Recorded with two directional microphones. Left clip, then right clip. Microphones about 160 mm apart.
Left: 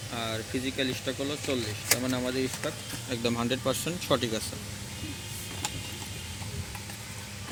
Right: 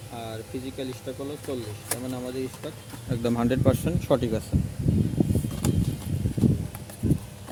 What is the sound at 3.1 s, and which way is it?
Speech, 60° right (ahead or behind).